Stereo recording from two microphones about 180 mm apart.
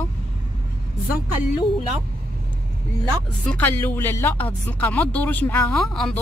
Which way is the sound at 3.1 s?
5° left (ahead or behind).